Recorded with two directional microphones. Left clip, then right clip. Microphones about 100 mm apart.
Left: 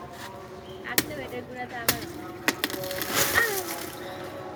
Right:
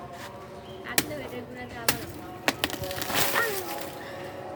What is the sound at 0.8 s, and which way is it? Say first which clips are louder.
Chop: left 1 dB; 25° right (ahead or behind).